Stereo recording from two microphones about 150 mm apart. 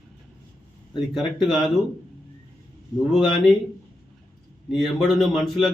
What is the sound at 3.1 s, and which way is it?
Speech, centre (ahead or behind).